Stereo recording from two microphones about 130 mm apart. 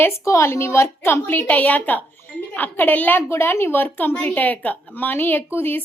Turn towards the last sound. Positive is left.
turn(degrees=15)  # may be behind; listen again after turning